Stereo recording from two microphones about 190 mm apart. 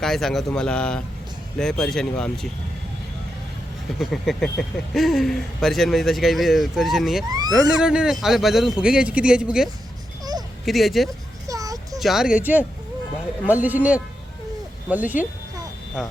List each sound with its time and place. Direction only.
0.0 s speech: centre (ahead or behind)
3.9 s speech: centre (ahead or behind)
7.3 s vehicle: 20° right (ahead or behind)
7.8 s speech: 5° right (ahead or behind)
10.7 s speech: centre (ahead or behind)
11.4 s a sound: 20° right (ahead or behind)
11.9 s speech: centre (ahead or behind)